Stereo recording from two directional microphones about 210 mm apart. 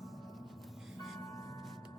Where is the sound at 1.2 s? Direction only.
15° left (ahead or behind).